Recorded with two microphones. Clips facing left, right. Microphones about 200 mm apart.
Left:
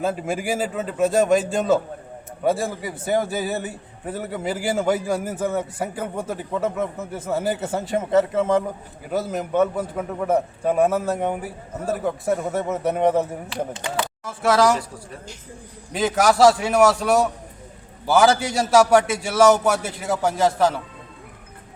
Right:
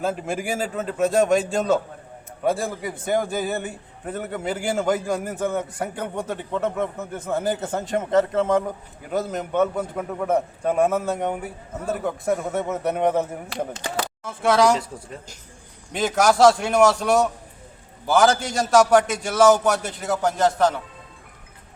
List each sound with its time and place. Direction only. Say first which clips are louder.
0.0 s a man's voice: left 1 dB; centre (ahead or behind)
13.5 s speech: left 1 dB; 45° right (ahead or behind)
14.3 s a man's voice: even; centre (ahead or behind)
15.9 s a man's voice: left 1 dB; centre (ahead or behind)